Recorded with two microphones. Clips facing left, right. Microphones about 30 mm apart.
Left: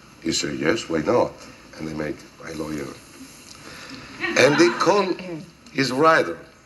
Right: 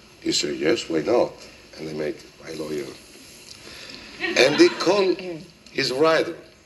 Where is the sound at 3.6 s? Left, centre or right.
Right.